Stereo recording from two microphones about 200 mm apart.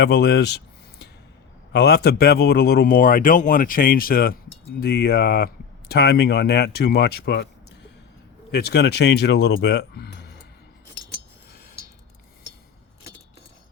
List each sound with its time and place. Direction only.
0.0 s a sound: 55° left (ahead or behind)
1.7 s speech: 50° left (ahead or behind)
8.5 s speech: 55° left (ahead or behind)